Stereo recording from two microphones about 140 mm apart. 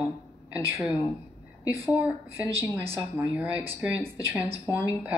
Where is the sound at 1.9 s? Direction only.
15° right (ahead or behind).